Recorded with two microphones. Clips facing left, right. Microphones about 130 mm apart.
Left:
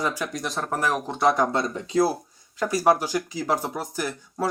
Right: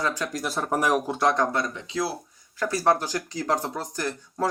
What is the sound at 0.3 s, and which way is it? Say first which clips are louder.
Speech: right 2 dB; 5° right (ahead or behind).